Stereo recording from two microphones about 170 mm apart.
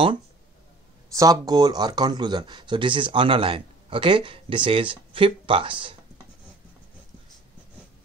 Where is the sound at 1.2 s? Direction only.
20° right (ahead or behind).